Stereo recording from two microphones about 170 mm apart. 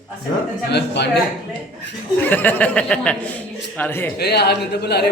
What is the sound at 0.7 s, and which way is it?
Speech, 80° left.